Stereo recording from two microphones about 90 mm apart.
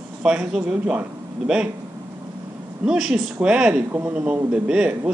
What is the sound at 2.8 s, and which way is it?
Speech, 5° right (ahead or behind).